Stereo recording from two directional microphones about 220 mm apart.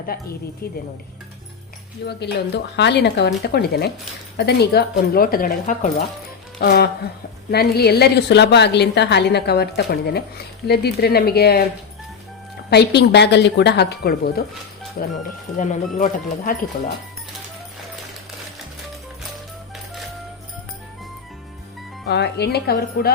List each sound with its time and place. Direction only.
0.0 s a woman's voice: 45° left (ahead or behind)
2.0 s a woman's voice: 50° left (ahead or behind)
12.7 s a woman's voice: 50° left (ahead or behind)
15.5 s speech: 35° left (ahead or behind)
22.0 s a woman's voice: 50° left (ahead or behind)